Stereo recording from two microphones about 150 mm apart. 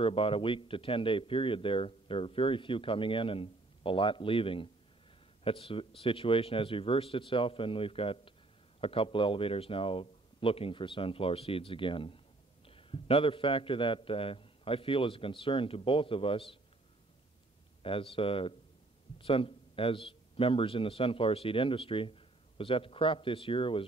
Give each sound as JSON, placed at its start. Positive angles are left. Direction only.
{"t": 0.0, "sound": "a man's voice", "side_deg": 40}
{"t": 17.8, "sound": "a man's voice", "side_deg": 35}